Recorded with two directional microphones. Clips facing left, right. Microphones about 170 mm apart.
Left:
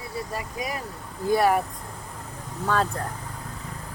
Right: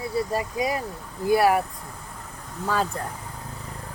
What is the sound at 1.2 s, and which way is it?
Speech, 10° right (ahead or behind).